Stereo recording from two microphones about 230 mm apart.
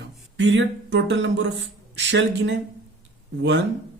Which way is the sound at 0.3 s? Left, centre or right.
Right.